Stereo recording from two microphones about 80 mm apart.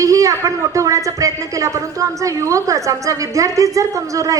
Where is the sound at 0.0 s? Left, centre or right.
Right.